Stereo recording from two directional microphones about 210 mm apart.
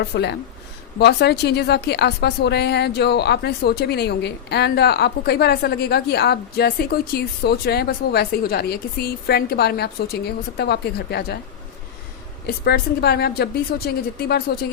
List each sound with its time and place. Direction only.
0.0 s a woman's voice: 50° left (ahead or behind)
12.5 s a woman's voice: 50° left (ahead or behind)